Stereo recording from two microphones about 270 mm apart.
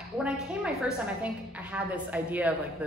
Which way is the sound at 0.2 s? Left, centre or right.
Centre.